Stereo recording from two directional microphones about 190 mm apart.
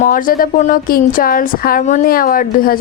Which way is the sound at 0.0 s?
45° left (ahead or behind).